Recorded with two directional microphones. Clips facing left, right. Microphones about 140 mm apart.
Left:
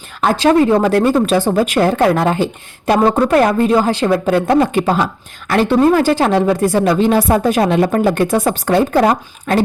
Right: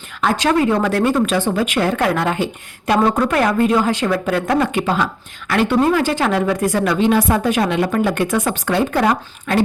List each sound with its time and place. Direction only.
0.2 s a woman's voice: 35° left (ahead or behind)